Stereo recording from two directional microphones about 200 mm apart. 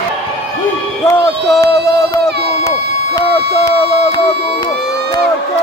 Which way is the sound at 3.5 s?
30° left (ahead or behind).